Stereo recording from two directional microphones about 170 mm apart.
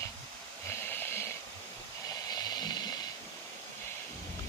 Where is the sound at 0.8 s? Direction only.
10° left (ahead or behind).